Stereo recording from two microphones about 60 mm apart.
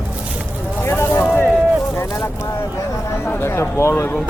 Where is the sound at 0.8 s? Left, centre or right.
Left.